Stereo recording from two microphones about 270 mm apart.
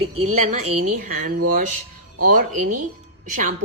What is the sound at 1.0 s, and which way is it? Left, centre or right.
Speech, right.